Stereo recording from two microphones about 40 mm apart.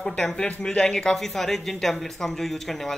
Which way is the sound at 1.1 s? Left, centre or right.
Centre.